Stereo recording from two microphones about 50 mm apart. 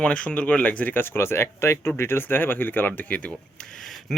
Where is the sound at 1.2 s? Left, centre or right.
Left.